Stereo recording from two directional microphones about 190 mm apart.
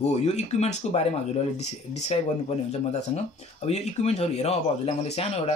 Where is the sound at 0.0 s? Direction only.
35° left (ahead or behind).